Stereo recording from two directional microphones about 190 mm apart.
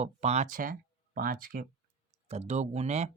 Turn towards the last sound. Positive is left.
turn(degrees=-35)  # may be behind; listen again after turning